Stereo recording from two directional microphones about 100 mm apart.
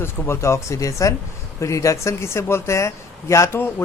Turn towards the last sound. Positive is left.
turn(degrees=25)  # may be behind; listen again after turning